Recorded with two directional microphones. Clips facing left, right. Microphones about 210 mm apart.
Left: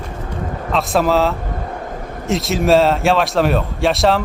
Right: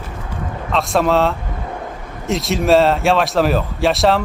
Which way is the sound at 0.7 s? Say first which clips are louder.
Even; centre (ahead or behind).